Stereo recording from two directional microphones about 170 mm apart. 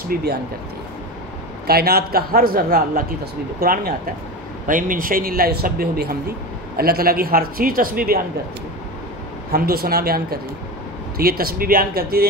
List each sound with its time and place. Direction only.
0.1 s speech: 65° right (ahead or behind)
1.7 s speech: 65° right (ahead or behind)
9.5 s speech: 60° right (ahead or behind)